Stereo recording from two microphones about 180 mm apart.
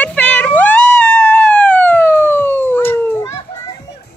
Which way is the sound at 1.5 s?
5° left (ahead or behind).